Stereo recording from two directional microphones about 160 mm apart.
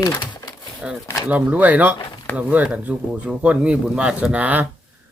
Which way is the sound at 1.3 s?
10° right (ahead or behind).